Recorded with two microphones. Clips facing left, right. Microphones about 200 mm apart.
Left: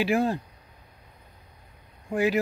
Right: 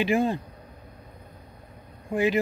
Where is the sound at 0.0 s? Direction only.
Centre (ahead or behind).